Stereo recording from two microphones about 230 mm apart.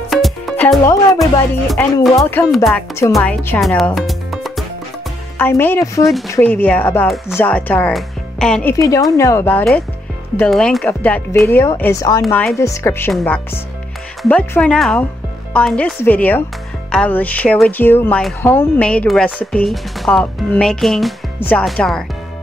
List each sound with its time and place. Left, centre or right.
0.1 s music: centre
2.0 s speech: centre
2.5 s speech: centre
6.0 s speech: centre
8.7 s speech: centre